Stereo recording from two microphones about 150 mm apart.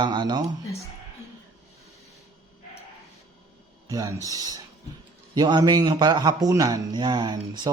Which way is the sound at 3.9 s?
25° right (ahead or behind).